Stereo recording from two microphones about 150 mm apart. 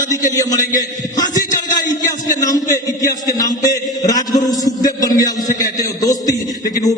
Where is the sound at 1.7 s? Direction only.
25° left (ahead or behind).